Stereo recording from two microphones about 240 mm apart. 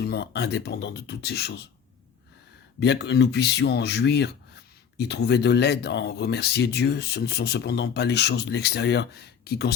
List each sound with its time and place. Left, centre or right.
0.0 s speech: left
2.8 s speech: left